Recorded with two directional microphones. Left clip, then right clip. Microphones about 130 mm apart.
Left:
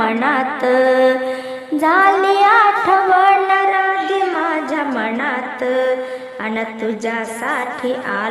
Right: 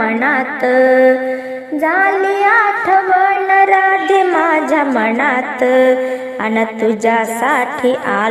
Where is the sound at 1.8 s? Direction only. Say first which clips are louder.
Left 1 dB; 5° right (ahead or behind).